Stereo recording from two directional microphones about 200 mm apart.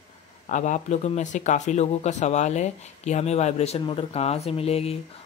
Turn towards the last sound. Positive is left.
turn(degrees=30)  # may be behind; listen again after turning